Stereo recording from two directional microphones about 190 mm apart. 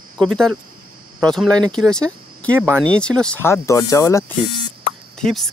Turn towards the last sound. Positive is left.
turn(degrees=0)  # may be behind; listen again after turning